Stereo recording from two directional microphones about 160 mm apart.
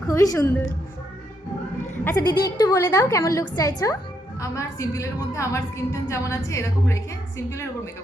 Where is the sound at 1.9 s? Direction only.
10° left (ahead or behind).